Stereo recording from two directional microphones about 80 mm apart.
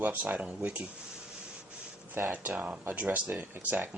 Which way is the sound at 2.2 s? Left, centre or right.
Right.